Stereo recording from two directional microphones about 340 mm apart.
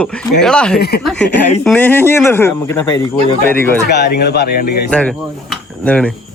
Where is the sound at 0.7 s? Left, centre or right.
Left.